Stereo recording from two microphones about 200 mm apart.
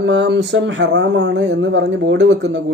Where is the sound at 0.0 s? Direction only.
65° right (ahead or behind).